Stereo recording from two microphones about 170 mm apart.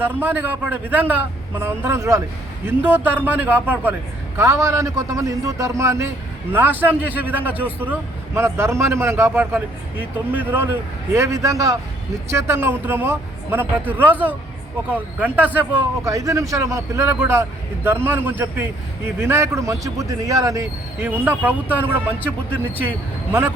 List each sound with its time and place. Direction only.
0.0 s a man's voice: 10° right (ahead or behind)